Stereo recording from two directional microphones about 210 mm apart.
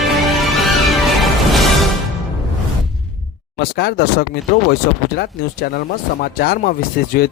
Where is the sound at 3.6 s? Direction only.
50° left (ahead or behind).